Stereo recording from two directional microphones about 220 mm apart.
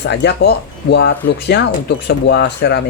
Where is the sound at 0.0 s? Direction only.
50° left (ahead or behind).